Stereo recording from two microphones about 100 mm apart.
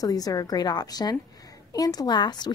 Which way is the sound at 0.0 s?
40° left (ahead or behind).